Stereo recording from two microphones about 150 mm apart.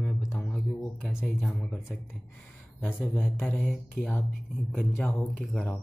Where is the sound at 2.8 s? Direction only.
10° left (ahead or behind).